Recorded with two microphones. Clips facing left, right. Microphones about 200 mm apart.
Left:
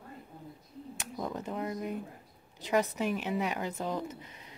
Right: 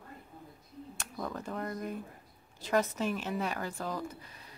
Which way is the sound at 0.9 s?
15° left (ahead or behind).